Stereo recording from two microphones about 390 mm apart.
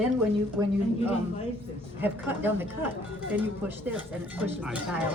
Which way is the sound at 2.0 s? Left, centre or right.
Centre.